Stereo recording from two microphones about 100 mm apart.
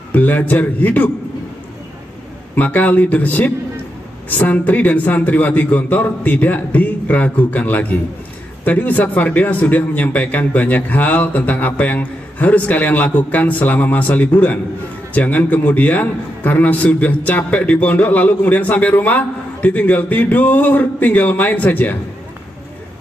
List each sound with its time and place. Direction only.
0.1 s a man's voice: 15° left (ahead or behind)
2.5 s a man's voice: 15° left (ahead or behind)